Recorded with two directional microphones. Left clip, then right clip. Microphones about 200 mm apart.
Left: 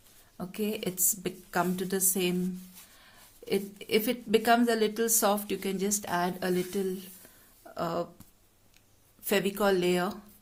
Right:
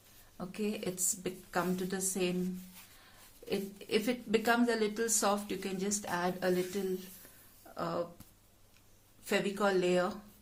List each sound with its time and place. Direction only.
0.3 s a woman's voice: 40° left (ahead or behind)
3.5 s a woman's voice: 40° left (ahead or behind)
7.8 s a sound: 40° left (ahead or behind)
9.2 s a woman's voice: 40° left (ahead or behind)